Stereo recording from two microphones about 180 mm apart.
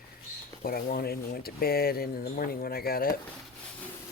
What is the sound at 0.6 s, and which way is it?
Speech, 55° left (ahead or behind).